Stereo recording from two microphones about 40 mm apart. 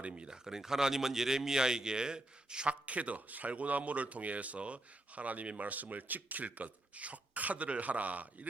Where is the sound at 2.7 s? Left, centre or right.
Right.